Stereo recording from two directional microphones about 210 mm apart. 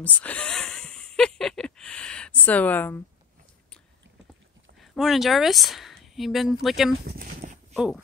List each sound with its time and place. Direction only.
0.0 s a sound: 5° left (ahead or behind)
4.7 s speech: centre (ahead or behind)
7.1 s horse: 45° right (ahead or behind)
7.7 s speech: centre (ahead or behind)